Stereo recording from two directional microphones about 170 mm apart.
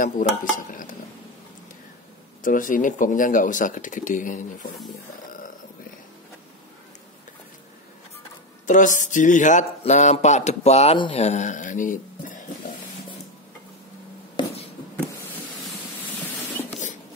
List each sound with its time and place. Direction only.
0.0 s mantra: 50° left (ahead or behind)
2.4 s mantra: 50° left (ahead or behind)
8.6 s mantra: 50° left (ahead or behind)
14.3 s writing: 35° left (ahead or behind)